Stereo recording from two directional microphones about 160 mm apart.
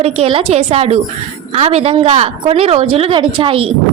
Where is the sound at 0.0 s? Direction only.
35° right (ahead or behind).